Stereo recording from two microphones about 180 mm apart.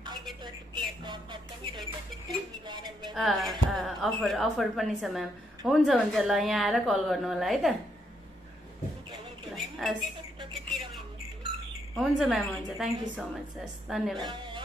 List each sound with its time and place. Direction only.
1.0 s music: 25° right (ahead or behind)
3.2 s a woman's voice: centre (ahead or behind)
9.1 s a woman's voice: centre (ahead or behind)
12.0 s a woman's voice: centre (ahead or behind)
14.3 s music: 25° right (ahead or behind)